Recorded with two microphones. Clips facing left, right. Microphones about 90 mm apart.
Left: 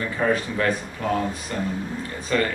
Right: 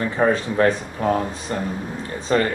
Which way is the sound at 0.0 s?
30° right (ahead or behind).